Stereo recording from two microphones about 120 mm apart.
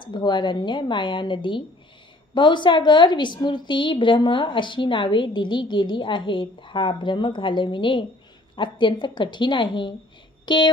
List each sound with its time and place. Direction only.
0.0 s a woman's voice: 40° left (ahead or behind)